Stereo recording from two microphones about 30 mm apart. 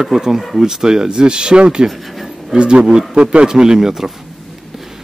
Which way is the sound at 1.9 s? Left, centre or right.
Centre.